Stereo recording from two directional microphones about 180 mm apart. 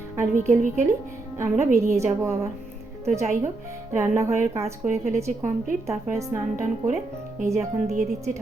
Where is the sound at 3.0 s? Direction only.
40° right (ahead or behind).